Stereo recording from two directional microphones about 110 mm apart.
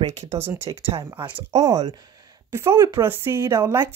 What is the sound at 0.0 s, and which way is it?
Speech, 85° right.